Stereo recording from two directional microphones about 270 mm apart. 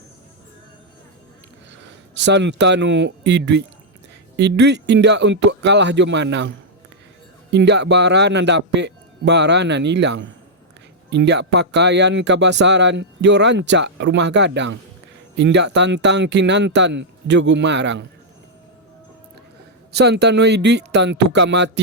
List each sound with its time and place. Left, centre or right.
1.7 s speech: right
7.5 s speech: right
19.9 s speech: right